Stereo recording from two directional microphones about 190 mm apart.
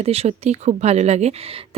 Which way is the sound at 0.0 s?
30° right (ahead or behind).